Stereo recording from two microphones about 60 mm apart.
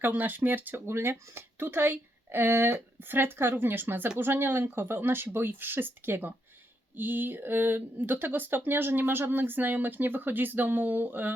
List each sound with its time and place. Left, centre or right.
0.0 s speech: right
0.9 s speech: right